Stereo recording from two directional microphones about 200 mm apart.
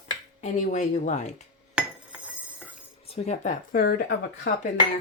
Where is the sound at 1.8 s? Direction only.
5° right (ahead or behind).